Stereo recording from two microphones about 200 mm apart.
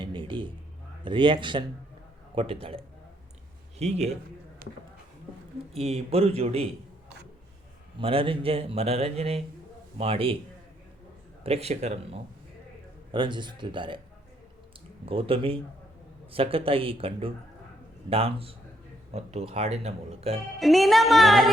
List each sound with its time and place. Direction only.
0.0 s a sound: 25° right (ahead or behind)
1.0 s speech: 25° right (ahead or behind)
4.6 s speech: 45° right (ahead or behind)
5.7 s speech: 30° right (ahead or behind)
7.9 s speech: 30° right (ahead or behind)
11.4 s speech: 30° right (ahead or behind)
13.1 s speech: 25° right (ahead or behind)
15.0 s speech: 30° right (ahead or behind)
20.6 s music: centre (ahead or behind)